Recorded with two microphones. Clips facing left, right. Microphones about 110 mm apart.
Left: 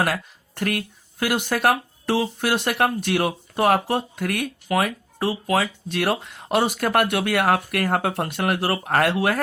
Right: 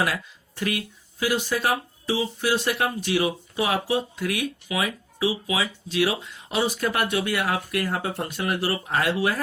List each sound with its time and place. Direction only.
0.0 s speech: 50° left (ahead or behind)